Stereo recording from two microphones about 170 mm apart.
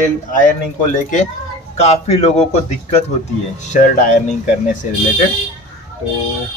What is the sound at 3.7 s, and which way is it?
Speech, 50° left (ahead or behind).